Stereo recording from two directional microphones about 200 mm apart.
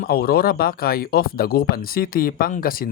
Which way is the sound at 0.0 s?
50° left (ahead or behind).